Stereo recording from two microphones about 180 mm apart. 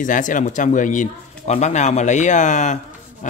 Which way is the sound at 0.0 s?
45° left (ahead or behind).